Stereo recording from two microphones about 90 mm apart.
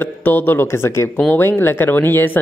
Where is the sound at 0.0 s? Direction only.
20° left (ahead or behind).